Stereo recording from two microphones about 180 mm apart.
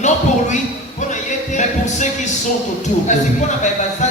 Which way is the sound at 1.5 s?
40° left (ahead or behind).